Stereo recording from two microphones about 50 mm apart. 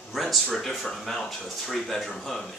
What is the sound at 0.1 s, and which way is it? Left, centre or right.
Speech, centre.